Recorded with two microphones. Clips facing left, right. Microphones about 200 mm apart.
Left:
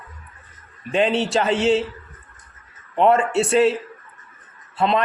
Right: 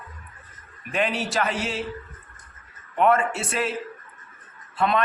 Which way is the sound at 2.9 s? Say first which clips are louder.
Left 4 dB; 30° left (ahead or behind).